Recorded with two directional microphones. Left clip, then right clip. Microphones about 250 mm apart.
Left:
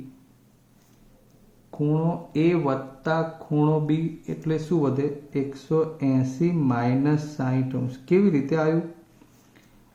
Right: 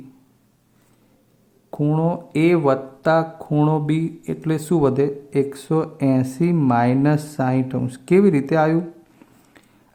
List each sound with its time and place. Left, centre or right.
1.7 s speech: right